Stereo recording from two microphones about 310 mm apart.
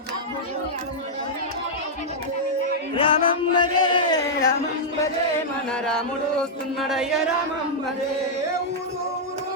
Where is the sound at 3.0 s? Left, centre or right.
Centre.